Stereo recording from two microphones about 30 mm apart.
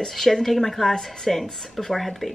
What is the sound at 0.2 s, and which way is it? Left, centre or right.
Speech, centre.